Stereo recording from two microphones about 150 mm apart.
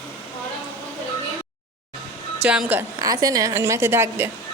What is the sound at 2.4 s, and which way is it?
Speech, 10° right (ahead or behind).